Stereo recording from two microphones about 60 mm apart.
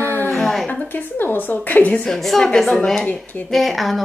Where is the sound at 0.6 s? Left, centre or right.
Left.